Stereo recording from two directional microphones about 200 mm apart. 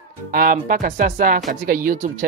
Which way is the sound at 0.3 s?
45° right (ahead or behind).